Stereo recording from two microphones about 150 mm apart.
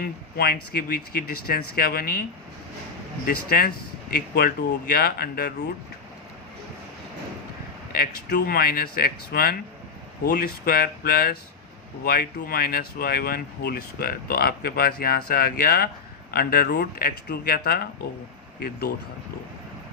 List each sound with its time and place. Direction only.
0.0 s speech: 90° left
3.2 s speech: 90° left
7.9 s speech: 75° left (ahead or behind)